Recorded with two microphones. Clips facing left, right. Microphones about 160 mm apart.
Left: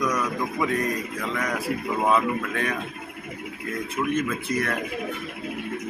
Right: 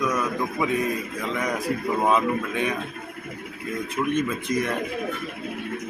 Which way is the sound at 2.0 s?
10° right (ahead or behind).